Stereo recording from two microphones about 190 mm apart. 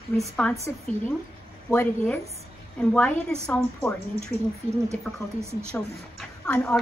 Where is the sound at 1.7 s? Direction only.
10° left (ahead or behind).